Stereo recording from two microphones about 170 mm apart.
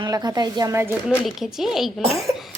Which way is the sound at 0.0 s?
25° right (ahead or behind).